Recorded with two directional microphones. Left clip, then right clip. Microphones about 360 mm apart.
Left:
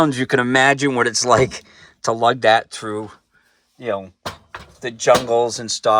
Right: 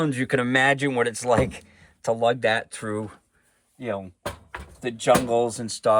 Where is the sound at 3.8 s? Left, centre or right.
Centre.